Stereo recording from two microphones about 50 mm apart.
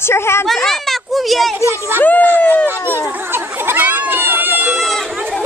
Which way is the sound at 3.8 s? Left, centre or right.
Right.